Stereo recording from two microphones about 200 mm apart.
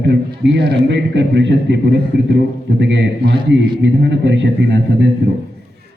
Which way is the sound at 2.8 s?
60° right (ahead or behind).